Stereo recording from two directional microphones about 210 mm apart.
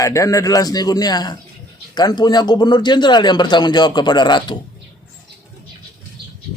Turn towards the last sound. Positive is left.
turn(degrees=20)  # may be behind; listen again after turning